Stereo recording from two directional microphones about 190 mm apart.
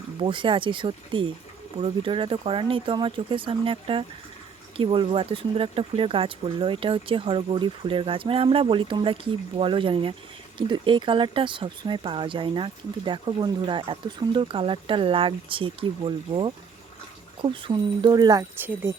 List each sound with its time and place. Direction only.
0.2 s speech: 25° right (ahead or behind)
18.6 s speech: 10° right (ahead or behind)